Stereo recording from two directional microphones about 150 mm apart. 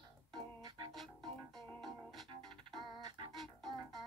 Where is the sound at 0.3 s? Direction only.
30° right (ahead or behind).